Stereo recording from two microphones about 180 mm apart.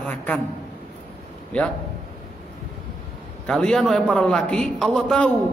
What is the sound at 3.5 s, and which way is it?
A man's voice, 5° left (ahead or behind).